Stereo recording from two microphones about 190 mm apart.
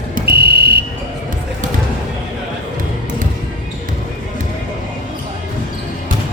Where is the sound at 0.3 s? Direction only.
55° right (ahead or behind).